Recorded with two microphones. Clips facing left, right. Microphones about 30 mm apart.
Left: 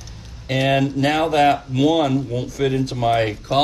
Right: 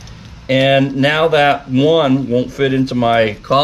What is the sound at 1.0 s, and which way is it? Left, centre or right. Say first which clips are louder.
Speech: right 5 dB; right.